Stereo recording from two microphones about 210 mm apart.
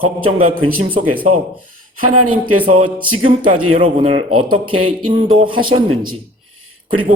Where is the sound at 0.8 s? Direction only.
25° right (ahead or behind).